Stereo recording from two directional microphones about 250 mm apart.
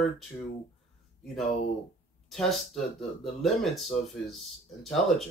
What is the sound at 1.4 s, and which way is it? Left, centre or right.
Speech, left.